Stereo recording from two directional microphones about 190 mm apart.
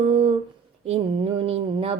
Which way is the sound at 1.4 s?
30° right (ahead or behind).